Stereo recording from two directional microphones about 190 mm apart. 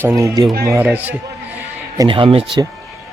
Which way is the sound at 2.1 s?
30° right (ahead or behind).